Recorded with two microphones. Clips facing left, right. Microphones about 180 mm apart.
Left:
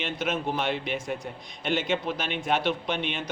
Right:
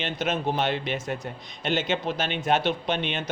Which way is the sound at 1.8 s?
25° right (ahead or behind).